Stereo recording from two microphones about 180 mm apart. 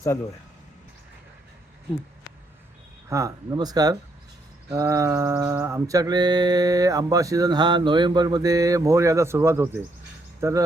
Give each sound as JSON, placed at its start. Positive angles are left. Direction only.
{"t": 3.1, "sound": "mantra", "side_deg": -15}
{"t": 10.4, "sound": "speech", "side_deg": -15}